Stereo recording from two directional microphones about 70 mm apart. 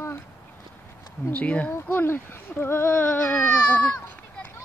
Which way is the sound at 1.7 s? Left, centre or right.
Left.